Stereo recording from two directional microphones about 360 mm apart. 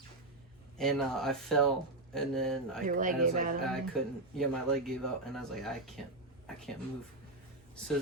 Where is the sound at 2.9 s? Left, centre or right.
Right.